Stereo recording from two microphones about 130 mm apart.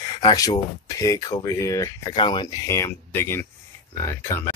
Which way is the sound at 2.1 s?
35° left (ahead or behind).